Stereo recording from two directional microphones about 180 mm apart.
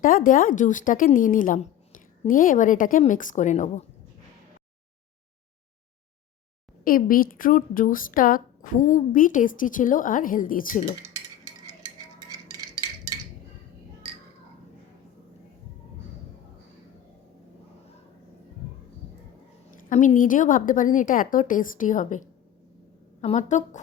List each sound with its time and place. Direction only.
0.0 s a woman's voice: 50° left (ahead or behind)
6.8 s a woman's voice: 50° left (ahead or behind)
11.0 s stir: 20° right (ahead or behind)
12.3 s a sound: 20° right (ahead or behind)
19.7 s a woman's voice: 45° left (ahead or behind)
23.2 s a woman's voice: 40° left (ahead or behind)